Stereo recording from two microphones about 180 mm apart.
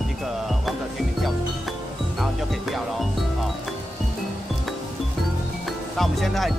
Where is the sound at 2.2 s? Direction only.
Centre (ahead or behind).